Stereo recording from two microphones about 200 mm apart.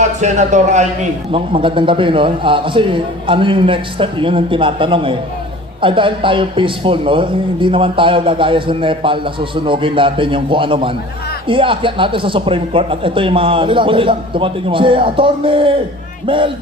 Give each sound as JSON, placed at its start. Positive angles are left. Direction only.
{"t": 0.2, "sound": "a man's voice", "side_deg": -35}
{"t": 1.3, "sound": "speech", "side_deg": -25}